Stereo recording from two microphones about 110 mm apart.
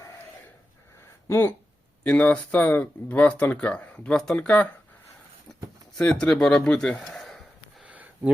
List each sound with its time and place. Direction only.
1.3 s speech: 20° left (ahead or behind)
6.0 s speech: 10° left (ahead or behind)
7.8 s a sound: 15° right (ahead or behind)